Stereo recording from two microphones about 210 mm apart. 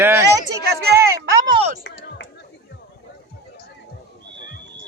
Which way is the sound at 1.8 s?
65° left (ahead or behind).